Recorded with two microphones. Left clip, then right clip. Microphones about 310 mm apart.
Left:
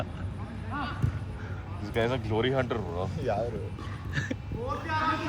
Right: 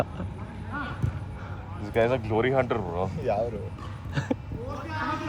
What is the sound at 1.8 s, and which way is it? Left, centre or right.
Speech, right.